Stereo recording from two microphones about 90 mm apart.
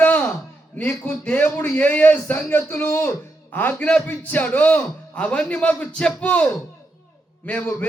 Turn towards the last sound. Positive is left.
turn(degrees=15)  # may be behind; listen again after turning